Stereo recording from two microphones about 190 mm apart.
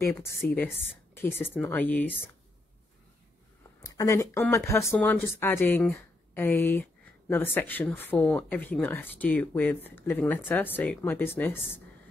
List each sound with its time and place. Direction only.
0.0 s speech: 15° left (ahead or behind)
3.8 s speech: 15° left (ahead or behind)